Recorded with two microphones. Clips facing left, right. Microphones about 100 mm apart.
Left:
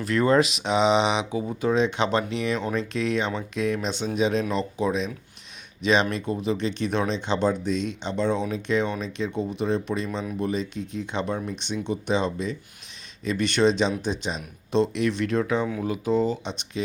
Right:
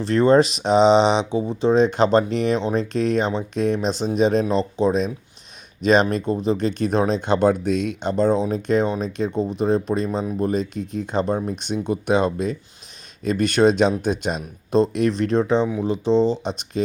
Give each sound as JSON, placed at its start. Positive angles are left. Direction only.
{"t": 0.0, "sound": "speech", "side_deg": -30}
{"t": 16.5, "sound": "speech", "side_deg": -45}